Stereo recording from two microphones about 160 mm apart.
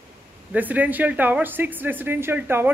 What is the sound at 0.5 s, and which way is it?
A man's voice, 10° right (ahead or behind).